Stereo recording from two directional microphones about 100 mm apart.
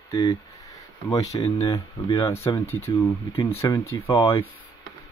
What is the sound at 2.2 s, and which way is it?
Speech, 25° left (ahead or behind).